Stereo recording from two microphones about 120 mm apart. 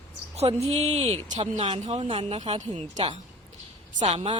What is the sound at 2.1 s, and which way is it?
Speech, 50° right (ahead or behind).